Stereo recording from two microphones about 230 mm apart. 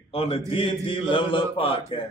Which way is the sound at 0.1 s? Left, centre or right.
Left.